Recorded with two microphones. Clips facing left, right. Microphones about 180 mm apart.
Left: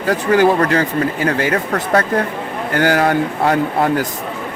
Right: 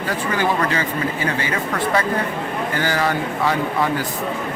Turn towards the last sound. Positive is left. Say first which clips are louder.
# left 5 dB
turn(degrees=55)  # may be behind; listen again after turning